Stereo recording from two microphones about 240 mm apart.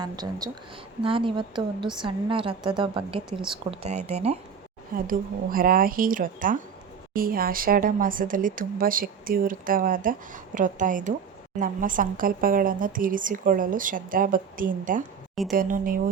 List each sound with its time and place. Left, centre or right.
0.0 s a woman's voice: centre; by 16.0 s right